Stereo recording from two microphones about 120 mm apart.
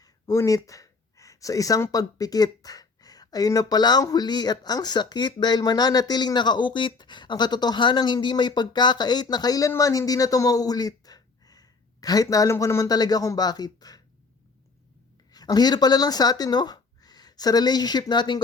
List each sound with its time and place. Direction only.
0.0 s speech: 25° left (ahead or behind)
15.3 s speech: 35° left (ahead or behind)